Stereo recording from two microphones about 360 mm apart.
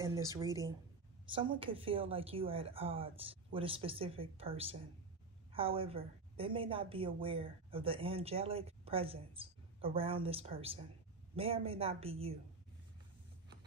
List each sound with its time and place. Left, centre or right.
0.0 s a woman's voice: centre